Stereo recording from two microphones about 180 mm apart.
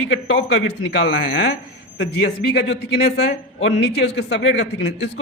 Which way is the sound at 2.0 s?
65° left (ahead or behind).